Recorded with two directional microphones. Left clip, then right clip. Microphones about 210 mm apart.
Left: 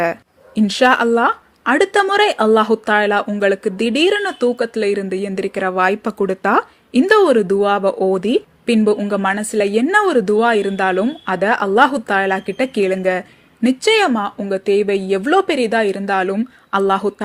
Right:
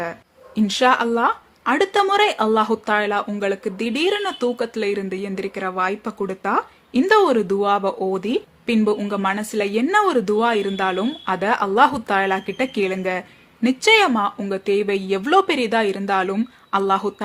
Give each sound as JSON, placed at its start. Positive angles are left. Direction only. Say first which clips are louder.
{"t": 0.5, "sound": "a woman's voice", "louder": "left 3 dB", "side_deg": 20}